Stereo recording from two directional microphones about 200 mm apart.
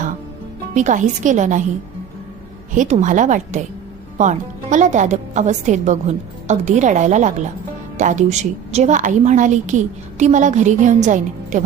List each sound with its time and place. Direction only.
0.7 s a woman's voice: 40° right (ahead or behind)
2.7 s a woman's voice: 35° right (ahead or behind)